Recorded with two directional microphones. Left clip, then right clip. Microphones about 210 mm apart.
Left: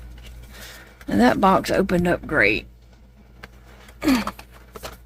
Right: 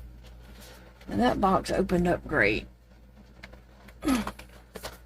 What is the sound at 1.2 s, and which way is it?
Speech, 30° left (ahead or behind).